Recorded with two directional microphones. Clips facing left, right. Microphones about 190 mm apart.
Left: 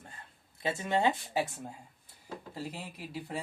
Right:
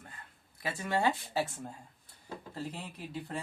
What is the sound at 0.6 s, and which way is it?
Speech, 25° left (ahead or behind).